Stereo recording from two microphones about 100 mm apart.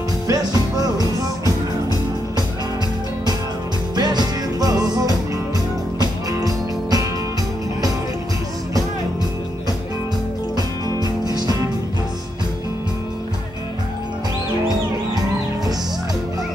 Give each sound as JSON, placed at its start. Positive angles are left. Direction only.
{"t": 0.3, "sound": "music", "side_deg": -40}
{"t": 3.9, "sound": "music", "side_deg": -45}
{"t": 10.5, "sound": "music", "side_deg": -45}